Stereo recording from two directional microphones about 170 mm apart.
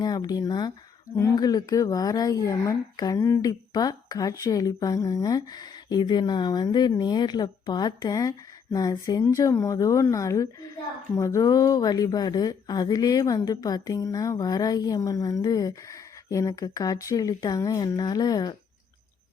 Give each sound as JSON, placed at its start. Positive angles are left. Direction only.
{"t": 0.0, "sound": "speech", "side_deg": 25}